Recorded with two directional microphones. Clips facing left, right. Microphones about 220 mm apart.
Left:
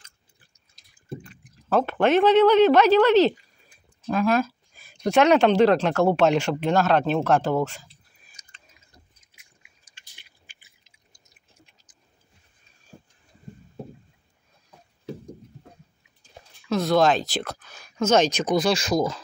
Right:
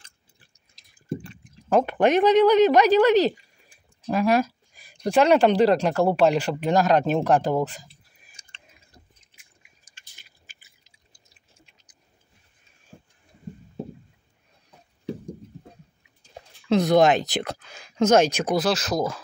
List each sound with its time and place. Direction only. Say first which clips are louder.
1.4 s speech: right 1 dB; 15° right (ahead or behind)
3.6 s a sound: even; 10° right (ahead or behind)
5.1 s speech: even; 5° right (ahead or behind)
9.8 s drip: left 2 dB; 45° right (ahead or behind); by 12.0 s 25° right (ahead or behind)
16.6 s speech: right 2 dB; 20° right (ahead or behind)
18.1 s speech: even; 10° right (ahead or behind)